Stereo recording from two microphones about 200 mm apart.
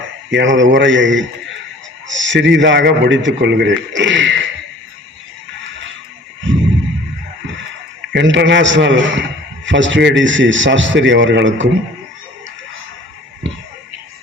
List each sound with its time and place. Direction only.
0.3 s a man's voice: 65° right (ahead or behind)
6.5 s a sound: 65° right (ahead or behind)
8.1 s a man's voice: 60° right (ahead or behind)